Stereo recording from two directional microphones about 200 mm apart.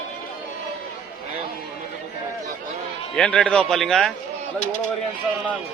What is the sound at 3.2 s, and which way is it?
Speech, 5° left (ahead or behind).